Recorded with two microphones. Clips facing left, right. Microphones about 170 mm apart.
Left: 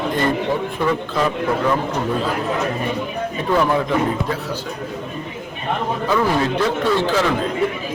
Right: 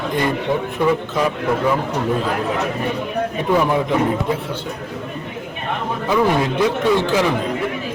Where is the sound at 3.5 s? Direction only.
10° right (ahead or behind).